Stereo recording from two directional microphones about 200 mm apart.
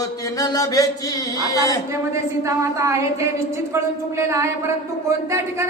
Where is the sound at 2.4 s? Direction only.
15° right (ahead or behind).